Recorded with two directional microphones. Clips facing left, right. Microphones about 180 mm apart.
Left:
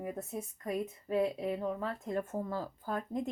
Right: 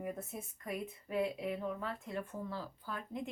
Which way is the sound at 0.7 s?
40° left (ahead or behind).